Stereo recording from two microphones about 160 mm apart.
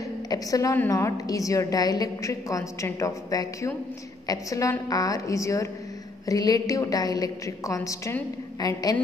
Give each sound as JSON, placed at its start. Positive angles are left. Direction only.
{"t": 0.3, "sound": "a woman's voice", "side_deg": 20}